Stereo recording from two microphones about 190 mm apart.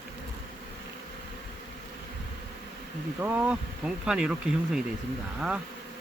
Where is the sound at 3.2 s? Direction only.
10° right (ahead or behind).